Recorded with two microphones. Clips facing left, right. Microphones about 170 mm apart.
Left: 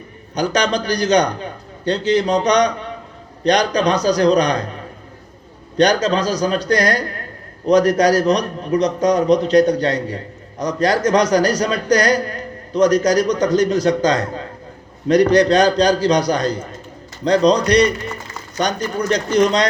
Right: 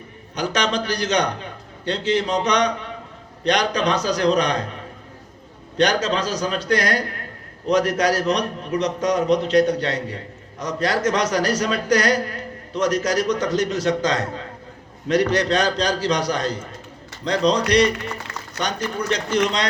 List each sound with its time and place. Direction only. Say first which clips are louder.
0.3 s a man's voice: left 4 dB; 35° left (ahead or behind)